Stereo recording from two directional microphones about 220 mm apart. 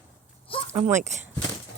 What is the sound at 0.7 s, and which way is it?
Speech, 30° right (ahead or behind).